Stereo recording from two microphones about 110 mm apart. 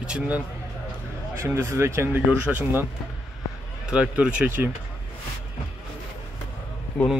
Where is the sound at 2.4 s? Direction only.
15° right (ahead or behind).